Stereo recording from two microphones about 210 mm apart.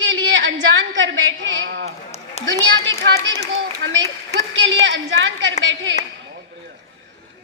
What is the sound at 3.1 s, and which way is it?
Speech, 15° left (ahead or behind).